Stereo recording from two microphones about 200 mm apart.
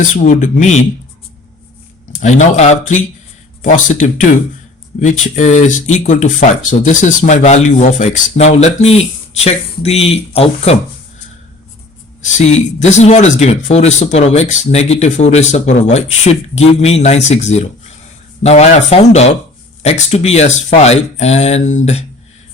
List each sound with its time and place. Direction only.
0.0 s speech: 40° left (ahead or behind)
2.6 s speech: 35° left (ahead or behind)
12.2 s speech: 35° left (ahead or behind)